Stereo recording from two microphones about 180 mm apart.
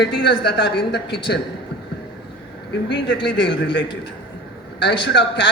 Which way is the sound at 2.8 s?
75° left (ahead or behind).